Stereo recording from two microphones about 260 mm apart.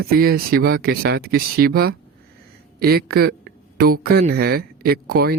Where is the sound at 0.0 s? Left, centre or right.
Right.